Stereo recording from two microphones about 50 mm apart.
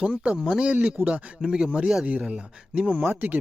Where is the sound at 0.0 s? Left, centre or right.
Right.